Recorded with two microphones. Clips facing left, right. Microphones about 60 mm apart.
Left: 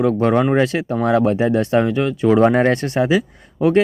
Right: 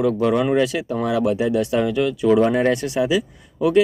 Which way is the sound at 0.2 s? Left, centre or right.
Left.